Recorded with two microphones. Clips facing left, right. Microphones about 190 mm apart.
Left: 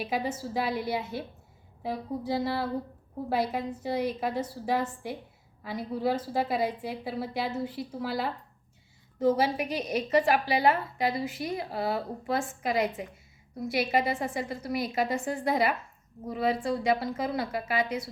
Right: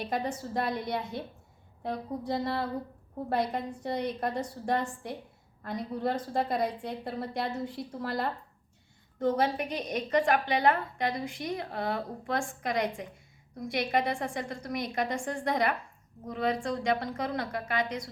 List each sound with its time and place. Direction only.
0.0 s a woman's voice: 5° left (ahead or behind)